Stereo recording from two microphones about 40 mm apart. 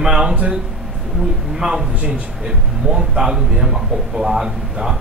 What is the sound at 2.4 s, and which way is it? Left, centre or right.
A man's voice, centre.